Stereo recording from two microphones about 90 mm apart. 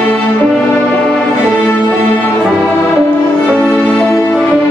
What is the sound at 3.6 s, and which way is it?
Music, 5° right (ahead or behind).